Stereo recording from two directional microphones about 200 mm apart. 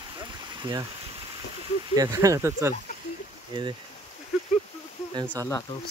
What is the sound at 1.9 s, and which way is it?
Speech, 15° right (ahead or behind).